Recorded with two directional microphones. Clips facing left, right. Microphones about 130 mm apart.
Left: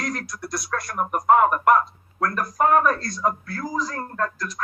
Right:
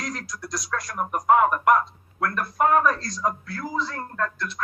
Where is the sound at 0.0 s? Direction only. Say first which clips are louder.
Left 3 dB; 60° left (ahead or behind).